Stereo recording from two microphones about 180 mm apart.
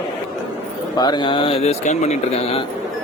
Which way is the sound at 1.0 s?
25° left (ahead or behind).